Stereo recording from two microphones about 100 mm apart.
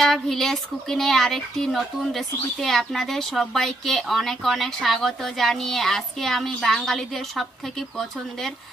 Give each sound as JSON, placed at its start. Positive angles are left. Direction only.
{"t": 0.0, "sound": "speech", "side_deg": 5}